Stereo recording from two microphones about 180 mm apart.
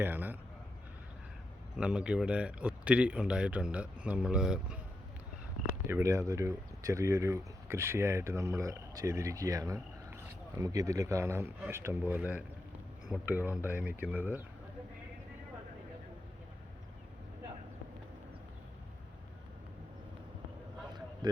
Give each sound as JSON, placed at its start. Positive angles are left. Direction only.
{"t": 0.0, "sound": "a man's voice", "side_deg": -10}
{"t": 1.8, "sound": "speech", "side_deg": -5}
{"t": 5.9, "sound": "speech", "side_deg": -15}